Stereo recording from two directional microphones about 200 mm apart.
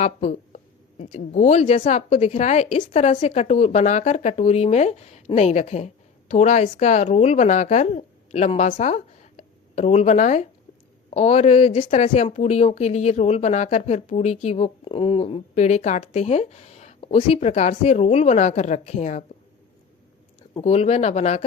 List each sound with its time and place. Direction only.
0.0 s speech: 35° left (ahead or behind)
20.5 s speech: 30° left (ahead or behind)